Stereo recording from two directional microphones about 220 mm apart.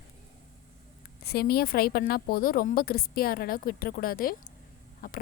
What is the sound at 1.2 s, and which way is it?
A woman's voice, 45° left (ahead or behind).